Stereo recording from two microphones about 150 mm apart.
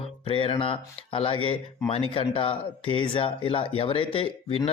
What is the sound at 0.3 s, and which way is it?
Speech, 35° left (ahead or behind).